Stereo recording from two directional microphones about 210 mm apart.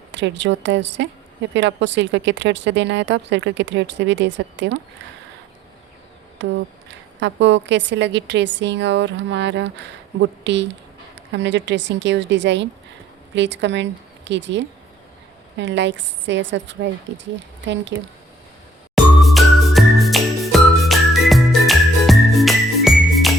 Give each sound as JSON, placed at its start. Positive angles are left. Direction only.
{"t": 0.1, "sound": "a woman's voice", "side_deg": -60}
{"t": 6.4, "sound": "a woman's voice", "side_deg": -60}
{"t": 17.9, "sound": "a woman's voice", "side_deg": -60}
{"t": 18.9, "sound": "music", "side_deg": 0}